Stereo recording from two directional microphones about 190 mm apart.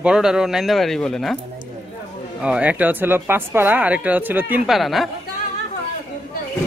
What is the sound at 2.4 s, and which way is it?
Speech, 5° right (ahead or behind).